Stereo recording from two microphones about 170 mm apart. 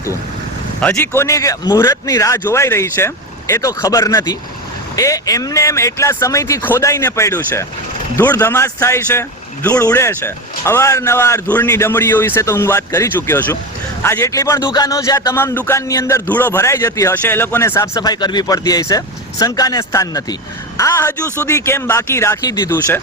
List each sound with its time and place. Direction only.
0.8 s a man's voice: 10° left (ahead or behind)